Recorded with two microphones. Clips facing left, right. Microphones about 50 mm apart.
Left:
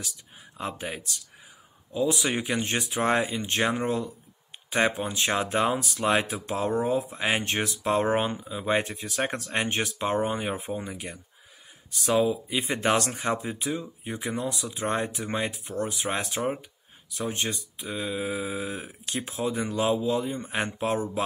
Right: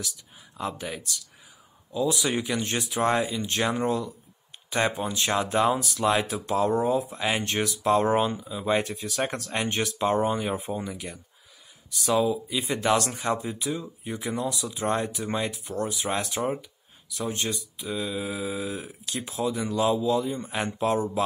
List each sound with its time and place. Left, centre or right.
0.6 s speech: left